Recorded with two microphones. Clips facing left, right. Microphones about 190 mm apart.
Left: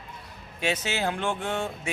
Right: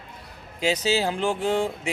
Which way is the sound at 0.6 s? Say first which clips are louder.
Right 5 dB; 35° right (ahead or behind).